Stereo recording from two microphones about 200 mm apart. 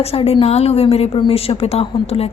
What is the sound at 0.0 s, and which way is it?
A woman's voice, 30° left (ahead or behind).